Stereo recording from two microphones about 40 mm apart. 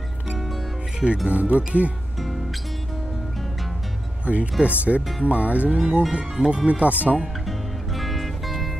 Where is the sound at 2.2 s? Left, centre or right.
Centre.